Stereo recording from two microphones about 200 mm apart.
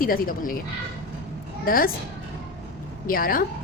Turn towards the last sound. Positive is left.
turn(degrees=45)  # may be behind; listen again after turning